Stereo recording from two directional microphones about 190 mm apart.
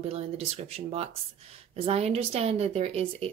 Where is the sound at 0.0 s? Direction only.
35° right (ahead or behind).